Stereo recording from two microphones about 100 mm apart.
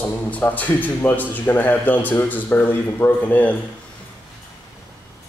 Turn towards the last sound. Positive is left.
turn(degrees=15)  # may be behind; listen again after turning